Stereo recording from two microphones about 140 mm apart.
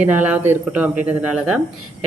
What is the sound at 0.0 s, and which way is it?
Speech, 10° right (ahead or behind).